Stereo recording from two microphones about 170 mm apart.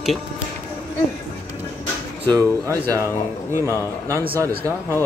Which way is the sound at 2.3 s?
20° right (ahead or behind).